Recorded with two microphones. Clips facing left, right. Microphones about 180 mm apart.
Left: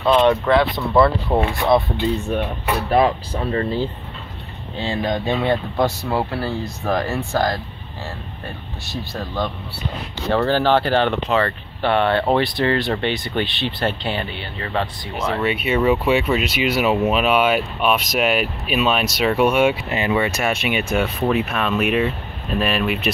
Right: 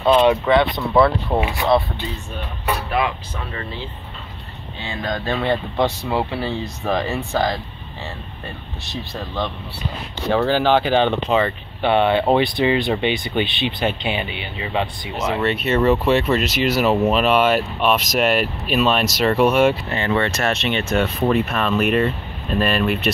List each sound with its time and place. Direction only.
0.0 s speech: 10° right (ahead or behind)
2.9 s speech: 35° left (ahead or behind)
5.0 s speech: 20° left (ahead or behind)
5.4 s speech: 5° left (ahead or behind)
10.3 s speech: 10° right (ahead or behind)
15.4 s speech: 5° left (ahead or behind)